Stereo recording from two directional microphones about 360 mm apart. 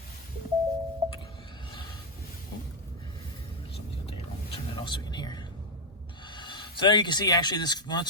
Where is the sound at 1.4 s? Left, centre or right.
Centre.